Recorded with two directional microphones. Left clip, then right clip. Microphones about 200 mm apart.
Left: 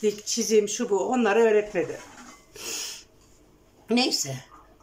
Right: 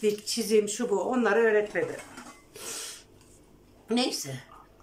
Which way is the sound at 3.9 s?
5° left (ahead or behind).